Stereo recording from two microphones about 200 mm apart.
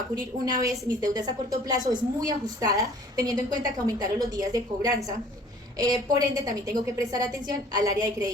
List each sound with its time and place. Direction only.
0.4 s a woman's voice: 20° right (ahead or behind)